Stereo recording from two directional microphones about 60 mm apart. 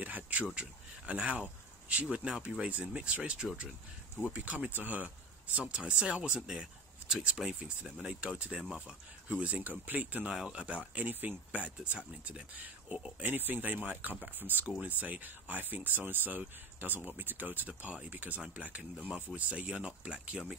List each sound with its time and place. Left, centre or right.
0.0 s a sound: right
0.6 s speech: centre
6.6 s speech: centre
11.0 s speech: right